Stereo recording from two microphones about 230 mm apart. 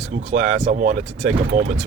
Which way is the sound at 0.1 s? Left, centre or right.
Right.